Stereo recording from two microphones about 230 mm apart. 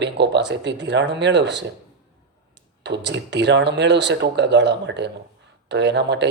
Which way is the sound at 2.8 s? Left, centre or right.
Right.